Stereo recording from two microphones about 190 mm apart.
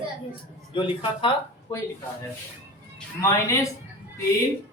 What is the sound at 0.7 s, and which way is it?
Speech, 25° left (ahead or behind).